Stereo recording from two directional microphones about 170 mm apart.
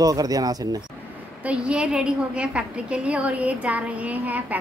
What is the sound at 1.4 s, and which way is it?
A woman's voice, 5° right (ahead or behind).